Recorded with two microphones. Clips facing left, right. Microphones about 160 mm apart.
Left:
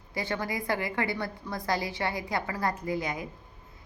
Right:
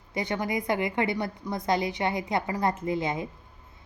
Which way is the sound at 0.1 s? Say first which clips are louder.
Right 3 dB; 20° right (ahead or behind).